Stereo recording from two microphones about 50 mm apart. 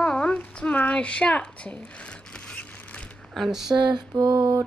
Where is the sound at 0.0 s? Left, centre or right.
Centre.